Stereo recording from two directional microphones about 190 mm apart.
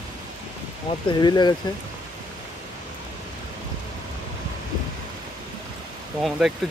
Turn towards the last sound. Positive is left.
turn(degrees=0)  # may be behind; listen again after turning